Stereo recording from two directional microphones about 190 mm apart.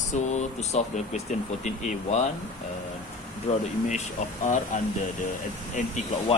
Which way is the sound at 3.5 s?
40° left (ahead or behind).